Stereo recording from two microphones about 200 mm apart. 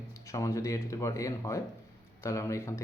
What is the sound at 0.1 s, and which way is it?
Speech, 15° left (ahead or behind).